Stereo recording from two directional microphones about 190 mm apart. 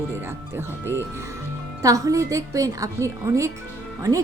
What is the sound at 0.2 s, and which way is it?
A woman's voice, 10° right (ahead or behind).